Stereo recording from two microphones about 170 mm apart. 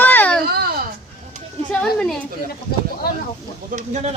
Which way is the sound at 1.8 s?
5° left (ahead or behind).